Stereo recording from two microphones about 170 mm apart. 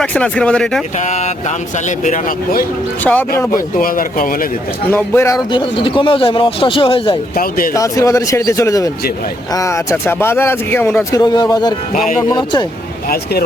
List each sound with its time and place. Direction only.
0.0 s speech: 5° left (ahead or behind)
0.9 s speech: 45° left (ahead or behind)
2.0 s speech: 55° left (ahead or behind)
3.0 s speech: 10° left (ahead or behind)
3.5 s speech: 55° left (ahead or behind)
4.9 s speech: 15° left (ahead or behind)
5.5 s a man's voice: 30° left (ahead or behind)
7.3 s speech: 55° left (ahead or behind)
7.7 s speech: 20° left (ahead or behind)
11.2 s speech: 25° left (ahead or behind)
11.9 s speech: 45° left (ahead or behind)
12.3 s speech: 25° left (ahead or behind)